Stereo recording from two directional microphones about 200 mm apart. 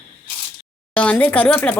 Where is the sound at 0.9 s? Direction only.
5° left (ahead or behind).